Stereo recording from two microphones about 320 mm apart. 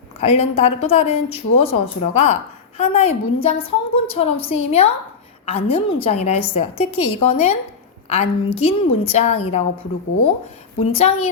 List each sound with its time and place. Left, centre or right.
0.2 s speech: centre
10.8 s speech: centre